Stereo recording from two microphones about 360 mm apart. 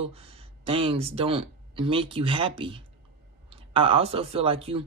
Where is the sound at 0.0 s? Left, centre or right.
Centre.